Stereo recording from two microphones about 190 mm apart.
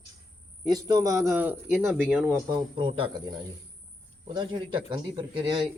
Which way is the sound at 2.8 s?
25° right (ahead or behind).